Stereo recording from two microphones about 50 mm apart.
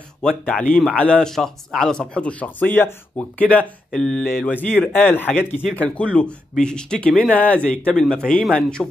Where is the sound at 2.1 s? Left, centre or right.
Left.